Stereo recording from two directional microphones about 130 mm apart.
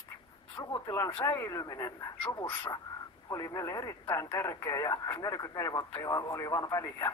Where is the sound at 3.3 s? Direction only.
25° left (ahead or behind).